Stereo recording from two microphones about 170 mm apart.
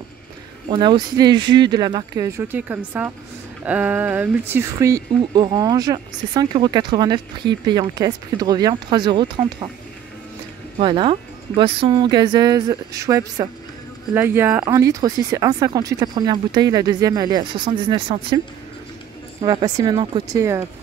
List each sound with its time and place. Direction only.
0.7 s speech: 25° right (ahead or behind)
10.8 s speech: 30° right (ahead or behind)
19.4 s speech: 20° right (ahead or behind)